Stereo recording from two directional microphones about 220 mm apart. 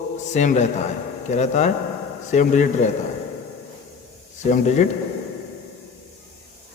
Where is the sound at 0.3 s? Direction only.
30° left (ahead or behind).